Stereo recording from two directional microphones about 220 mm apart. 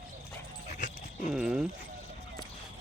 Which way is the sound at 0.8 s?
35° left (ahead or behind).